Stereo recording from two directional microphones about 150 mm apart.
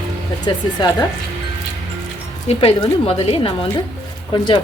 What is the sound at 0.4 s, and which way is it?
Speech, 30° left (ahead or behind).